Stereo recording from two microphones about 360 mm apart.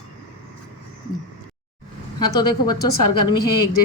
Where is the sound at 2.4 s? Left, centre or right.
Centre.